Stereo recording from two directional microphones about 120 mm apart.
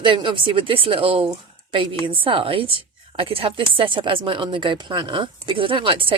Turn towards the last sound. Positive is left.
turn(degrees=-45)  # may be behind; listen again after turning